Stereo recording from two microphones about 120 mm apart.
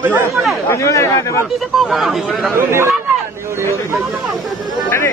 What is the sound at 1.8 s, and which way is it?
Speech, centre (ahead or behind).